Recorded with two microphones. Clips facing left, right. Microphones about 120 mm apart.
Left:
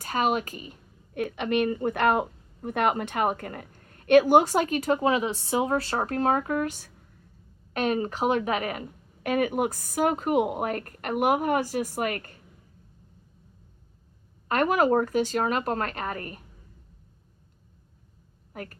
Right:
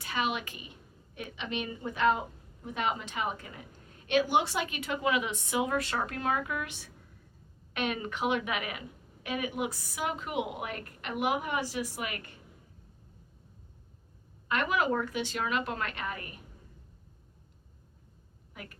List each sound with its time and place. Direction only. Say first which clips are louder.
0.0 s a woman's voice: left 7 dB; 40° left (ahead or behind)
14.4 s a woman's voice: left 7 dB; 45° left (ahead or behind)
18.5 s a woman's voice: left 8 dB; 45° left (ahead or behind)